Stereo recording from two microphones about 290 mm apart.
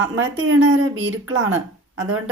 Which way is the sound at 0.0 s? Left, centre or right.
Right.